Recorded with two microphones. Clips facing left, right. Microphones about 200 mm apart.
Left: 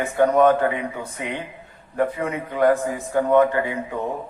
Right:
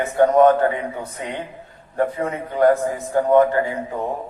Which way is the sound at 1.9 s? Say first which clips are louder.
Right 1 dB; 35° right (ahead or behind).